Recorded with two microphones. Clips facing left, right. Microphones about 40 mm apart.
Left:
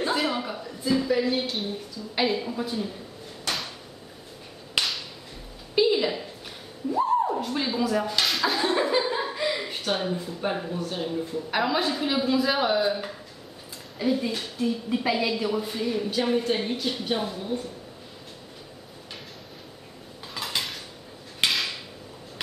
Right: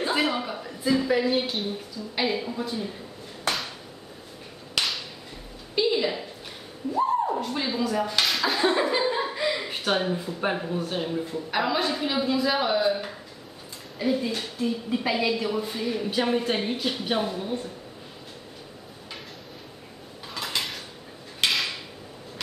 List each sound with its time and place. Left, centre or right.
0.1 s a woman's voice: centre
4.7 s a sound: centre
5.8 s a woman's voice: centre
9.7 s a woman's voice: centre
11.5 s a woman's voice: centre
20.3 s cutlery: centre
21.4 s a sound: centre